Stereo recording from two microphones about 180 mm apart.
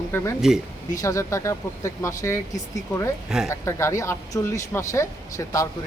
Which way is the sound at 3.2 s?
5° right (ahead or behind).